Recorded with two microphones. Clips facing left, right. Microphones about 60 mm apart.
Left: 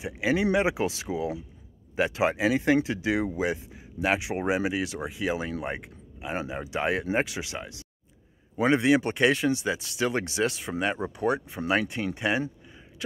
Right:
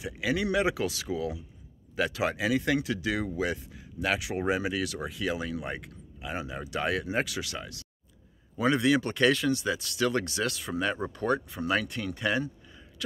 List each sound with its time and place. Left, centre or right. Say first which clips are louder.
0.0 s speech: left 4 dB; left